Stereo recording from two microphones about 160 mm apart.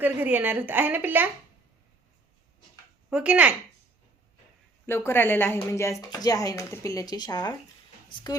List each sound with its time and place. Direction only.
0.0 s a woman's voice: 10° right (ahead or behind)
3.1 s a woman's voice: 5° right (ahead or behind)
4.9 s speech: 15° left (ahead or behind)